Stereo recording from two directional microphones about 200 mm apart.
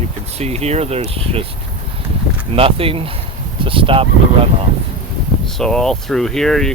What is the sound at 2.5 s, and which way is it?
Speech, 30° right (ahead or behind).